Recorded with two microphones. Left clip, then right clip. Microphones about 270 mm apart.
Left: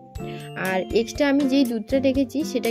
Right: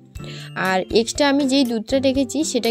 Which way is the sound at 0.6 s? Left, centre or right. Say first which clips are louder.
Right 4 dB; right.